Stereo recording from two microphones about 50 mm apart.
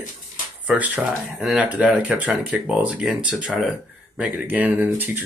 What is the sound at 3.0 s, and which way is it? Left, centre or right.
Speech, centre.